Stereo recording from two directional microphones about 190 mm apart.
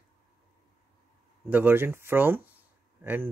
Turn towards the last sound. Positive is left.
turn(degrees=-10)  # may be behind; listen again after turning